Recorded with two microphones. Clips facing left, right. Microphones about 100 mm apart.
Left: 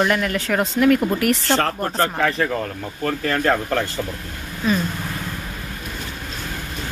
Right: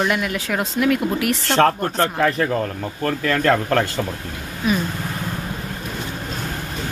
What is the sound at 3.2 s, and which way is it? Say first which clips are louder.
Speech: right 2 dB; 70° right (ahead or behind).